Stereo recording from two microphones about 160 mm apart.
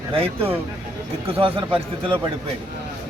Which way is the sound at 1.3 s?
35° right (ahead or behind).